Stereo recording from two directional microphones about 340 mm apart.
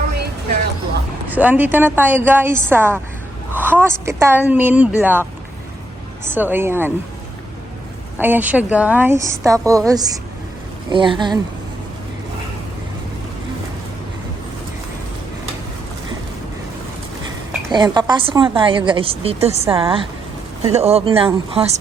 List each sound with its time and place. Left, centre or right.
1.3 s a woman's voice: centre
3.5 s a sound: centre
4.0 s a woman's voice: centre
8.2 s a woman's voice: centre
17.7 s a woman's voice: centre